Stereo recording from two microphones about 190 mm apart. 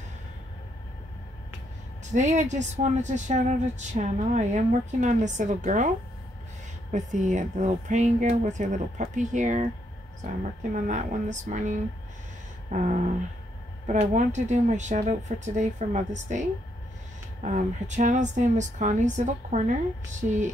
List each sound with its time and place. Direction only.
2.1 s speech: 40° right (ahead or behind)
6.9 s speech: 40° right (ahead or behind)
10.7 s speech: 40° right (ahead or behind)
12.7 s speech: 40° right (ahead or behind)